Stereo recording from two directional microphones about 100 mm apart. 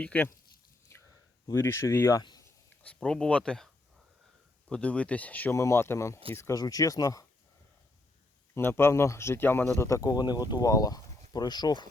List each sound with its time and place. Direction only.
0.0 s speech: 15° left (ahead or behind)
0.9 s a sound: 30° left (ahead or behind)
1.5 s speech: 25° left (ahead or behind)
2.8 s speech: 10° left (ahead or behind)
4.7 s speech: 10° left (ahead or behind)
5.5 s speech: 30° left (ahead or behind)
6.6 s speech: 35° left (ahead or behind)
8.5 s speech: 25° left (ahead or behind); by 11.9 s 45° left (ahead or behind)